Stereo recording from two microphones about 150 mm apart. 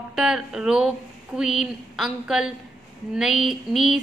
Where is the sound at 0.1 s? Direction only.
5° right (ahead or behind).